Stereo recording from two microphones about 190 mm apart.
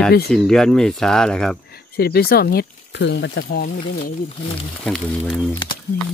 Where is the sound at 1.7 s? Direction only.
55° left (ahead or behind).